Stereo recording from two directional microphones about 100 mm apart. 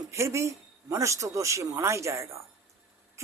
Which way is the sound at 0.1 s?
30° right (ahead or behind).